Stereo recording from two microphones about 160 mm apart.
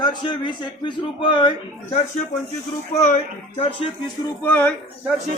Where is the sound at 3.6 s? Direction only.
35° left (ahead or behind).